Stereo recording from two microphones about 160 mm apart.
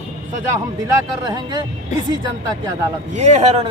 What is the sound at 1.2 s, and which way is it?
Speech, 25° right (ahead or behind).